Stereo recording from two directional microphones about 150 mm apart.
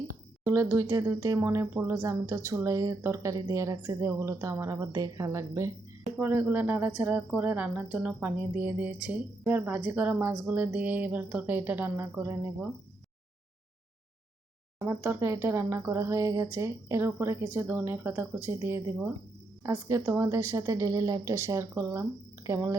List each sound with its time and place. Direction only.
0.4 s speech: 20° right (ahead or behind)
14.8 s speech: 15° right (ahead or behind)